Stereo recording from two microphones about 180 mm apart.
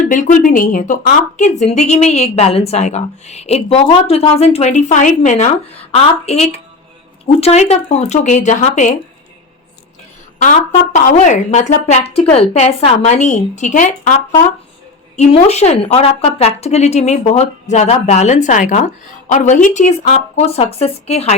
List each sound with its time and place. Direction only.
0.0 s a woman's voice: 45° left (ahead or behind)
10.9 s a woman's voice: 40° left (ahead or behind)